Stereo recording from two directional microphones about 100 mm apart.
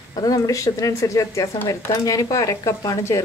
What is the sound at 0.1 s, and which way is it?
Speech, 40° left (ahead or behind).